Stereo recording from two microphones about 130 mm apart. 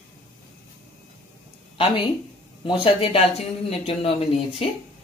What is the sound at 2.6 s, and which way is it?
A woman's voice, 45° left (ahead or behind).